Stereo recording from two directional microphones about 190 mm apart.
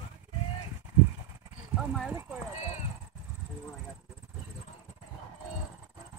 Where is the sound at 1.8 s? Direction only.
5° right (ahead or behind).